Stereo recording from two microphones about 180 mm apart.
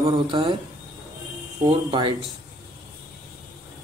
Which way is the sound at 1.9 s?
30° right (ahead or behind).